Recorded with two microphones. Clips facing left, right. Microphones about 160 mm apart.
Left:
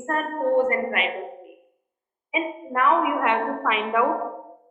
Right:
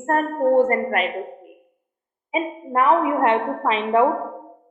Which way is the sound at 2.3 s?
35° right (ahead or behind).